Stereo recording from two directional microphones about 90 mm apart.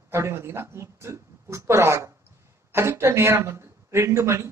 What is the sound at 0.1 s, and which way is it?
A man's voice, 30° right (ahead or behind).